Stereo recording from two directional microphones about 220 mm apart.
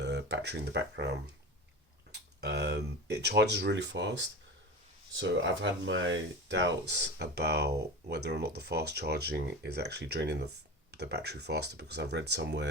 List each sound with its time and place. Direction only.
0.0 s speech: 50° right (ahead or behind)
2.4 s speech: 50° right (ahead or behind)
5.8 s speech: 55° right (ahead or behind)